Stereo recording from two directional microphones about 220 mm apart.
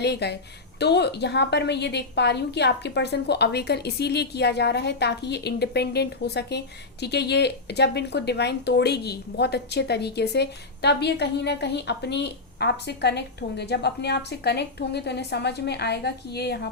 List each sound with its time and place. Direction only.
0.0 s speech: 50° left (ahead or behind)